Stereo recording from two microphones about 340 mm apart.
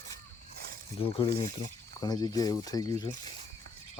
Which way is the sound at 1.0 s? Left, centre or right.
Centre.